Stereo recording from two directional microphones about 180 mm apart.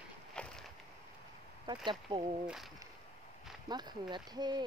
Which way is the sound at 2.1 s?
25° right (ahead or behind).